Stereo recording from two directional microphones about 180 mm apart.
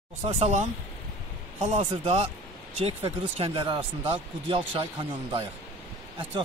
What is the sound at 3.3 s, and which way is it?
Speech, 30° right (ahead or behind).